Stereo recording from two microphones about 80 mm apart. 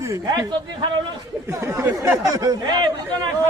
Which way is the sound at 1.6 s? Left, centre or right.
Right.